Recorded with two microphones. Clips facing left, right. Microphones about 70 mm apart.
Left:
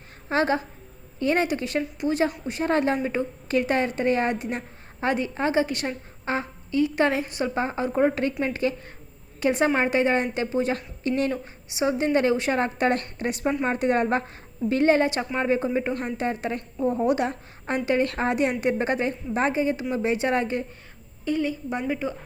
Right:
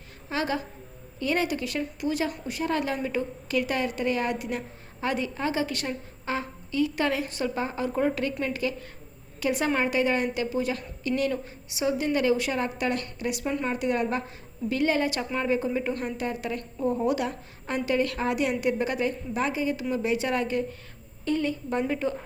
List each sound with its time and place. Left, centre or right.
0.3 s a woman's voice: left
21.2 s a woman's voice: centre